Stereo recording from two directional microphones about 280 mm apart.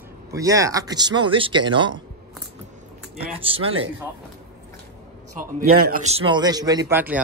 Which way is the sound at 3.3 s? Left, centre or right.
Centre.